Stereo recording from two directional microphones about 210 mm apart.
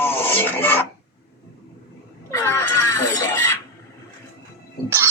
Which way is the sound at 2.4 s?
15° left (ahead or behind).